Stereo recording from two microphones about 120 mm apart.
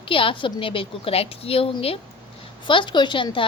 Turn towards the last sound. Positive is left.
turn(degrees=45)  # may be behind; listen again after turning